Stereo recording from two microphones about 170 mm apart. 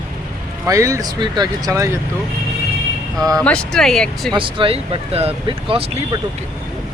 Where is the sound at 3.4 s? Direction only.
5° left (ahead or behind).